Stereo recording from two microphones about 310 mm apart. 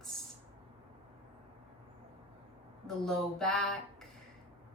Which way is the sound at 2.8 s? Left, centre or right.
Centre.